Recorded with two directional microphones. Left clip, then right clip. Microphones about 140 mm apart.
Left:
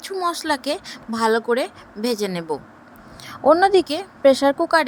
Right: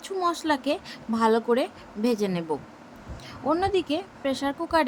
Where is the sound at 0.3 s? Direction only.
50° left (ahead or behind).